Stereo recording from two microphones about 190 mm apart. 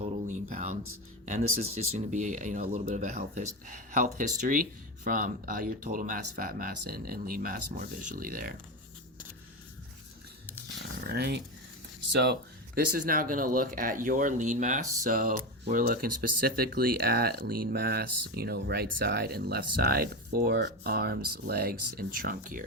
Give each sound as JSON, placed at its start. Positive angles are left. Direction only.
{"t": 0.0, "sound": "a sound", "side_deg": -40}
{"t": 1.2, "sound": "speech", "side_deg": -40}
{"t": 11.0, "sound": "speech", "side_deg": -60}